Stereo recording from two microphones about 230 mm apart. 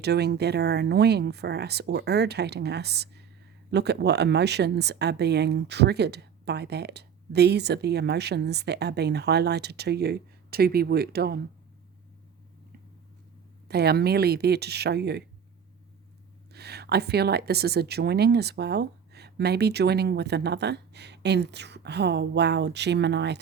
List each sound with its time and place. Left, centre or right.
0.0 s speech: right
13.7 s speech: right
16.5 s speech: right